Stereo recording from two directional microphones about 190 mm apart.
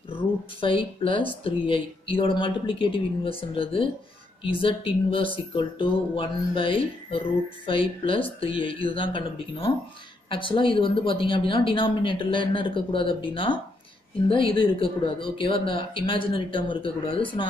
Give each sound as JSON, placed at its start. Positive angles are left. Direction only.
{"t": 0.6, "sound": "speech", "side_deg": 25}
{"t": 10.3, "sound": "speech", "side_deg": 25}